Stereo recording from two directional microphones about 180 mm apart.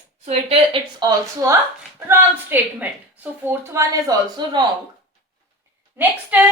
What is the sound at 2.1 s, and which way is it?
A woman's voice, 10° right (ahead or behind).